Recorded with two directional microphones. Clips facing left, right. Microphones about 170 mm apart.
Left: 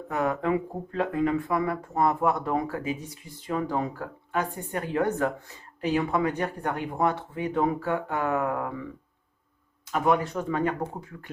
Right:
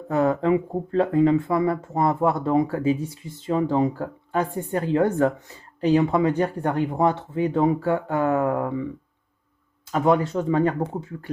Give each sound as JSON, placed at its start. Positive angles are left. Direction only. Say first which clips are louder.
{"t": 0.1, "sound": "speech", "louder": "right 6 dB", "side_deg": -30}
{"t": 9.9, "sound": "speech", "louder": "right 4 dB", "side_deg": -30}